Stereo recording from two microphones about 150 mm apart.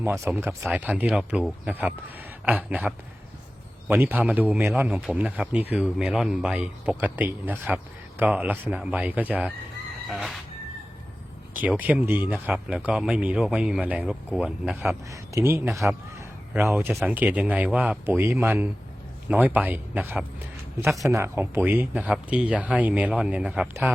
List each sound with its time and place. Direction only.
0.0 s a man's voice: 15° right (ahead or behind)
10.1 s music: centre (ahead or behind)
11.6 s a man's voice: 10° right (ahead or behind)
15.1 s a man's voice: 15° right (ahead or behind)
16.9 s music: centre (ahead or behind)
17.2 s a man's voice: 10° right (ahead or behind)
20.8 s music: centre (ahead or behind)
21.1 s a man's voice: 15° right (ahead or behind)